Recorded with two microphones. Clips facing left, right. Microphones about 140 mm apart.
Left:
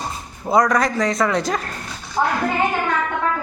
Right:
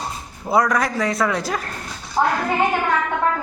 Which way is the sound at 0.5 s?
5° right (ahead or behind).